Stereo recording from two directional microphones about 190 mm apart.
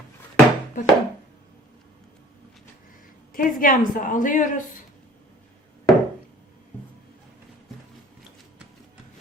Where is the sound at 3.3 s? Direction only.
45° left (ahead or behind).